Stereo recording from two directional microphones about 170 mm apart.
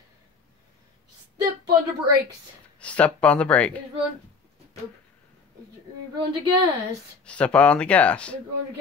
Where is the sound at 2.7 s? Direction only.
10° left (ahead or behind).